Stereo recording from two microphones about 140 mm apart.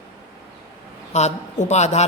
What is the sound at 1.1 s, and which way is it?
Speech, 60° left (ahead or behind).